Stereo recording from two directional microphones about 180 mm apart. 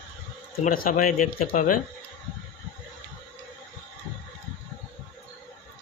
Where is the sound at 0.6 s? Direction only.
50° left (ahead or behind).